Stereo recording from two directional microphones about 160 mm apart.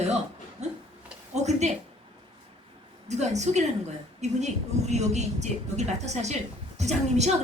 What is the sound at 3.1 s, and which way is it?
A woman's voice, 45° right (ahead or behind).